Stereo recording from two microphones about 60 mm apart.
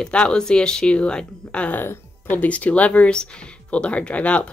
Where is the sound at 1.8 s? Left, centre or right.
Left.